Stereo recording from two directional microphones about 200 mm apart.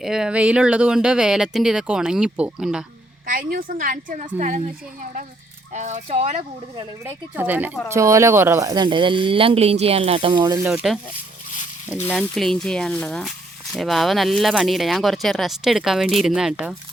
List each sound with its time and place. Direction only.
0.0 s speech: 5° right (ahead or behind)
3.2 s a woman's voice: 45° right (ahead or behind)
5.7 s speech: 35° right (ahead or behind)
7.0 s speech: 10° right (ahead or behind)
10.7 s speech: 5° right (ahead or behind)
12.0 s speech: 5° left (ahead or behind)